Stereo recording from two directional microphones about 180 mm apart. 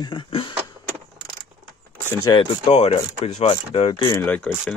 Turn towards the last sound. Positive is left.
turn(degrees=10)  # may be behind; listen again after turning